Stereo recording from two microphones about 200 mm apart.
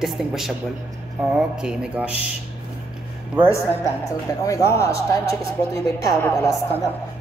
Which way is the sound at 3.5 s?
15° left (ahead or behind).